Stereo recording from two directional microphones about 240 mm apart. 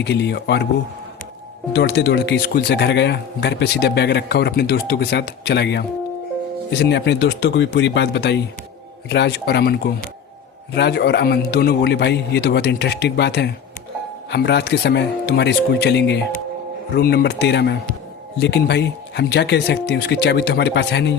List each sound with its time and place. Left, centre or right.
0.0 s speech: left
1.7 s speech: left